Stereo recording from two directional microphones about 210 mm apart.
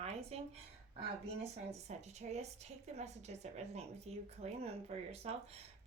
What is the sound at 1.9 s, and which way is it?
A woman's voice, 30° right (ahead or behind).